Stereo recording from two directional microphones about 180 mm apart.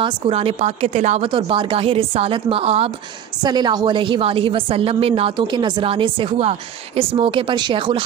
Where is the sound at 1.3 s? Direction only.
30° right (ahead or behind).